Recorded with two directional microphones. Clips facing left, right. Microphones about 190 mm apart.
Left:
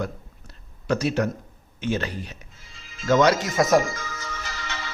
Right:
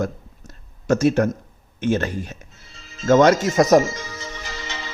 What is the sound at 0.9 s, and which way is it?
Speech, 50° right (ahead or behind).